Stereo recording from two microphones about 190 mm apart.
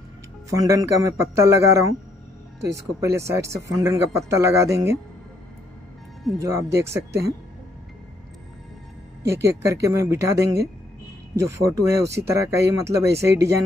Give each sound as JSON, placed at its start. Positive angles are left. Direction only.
{"t": 0.5, "sound": "speech", "side_deg": -15}
{"t": 2.6, "sound": "speech", "side_deg": -15}
{"t": 6.3, "sound": "speech", "side_deg": -15}
{"t": 9.2, "sound": "speech", "side_deg": -15}